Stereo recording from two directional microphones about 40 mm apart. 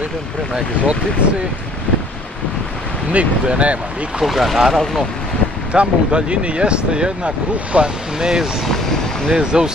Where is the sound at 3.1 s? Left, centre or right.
Right.